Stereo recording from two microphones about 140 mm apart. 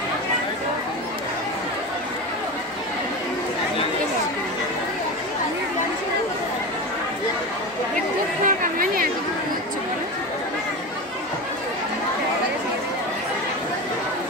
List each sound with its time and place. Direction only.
8.5 s chatter: 90° right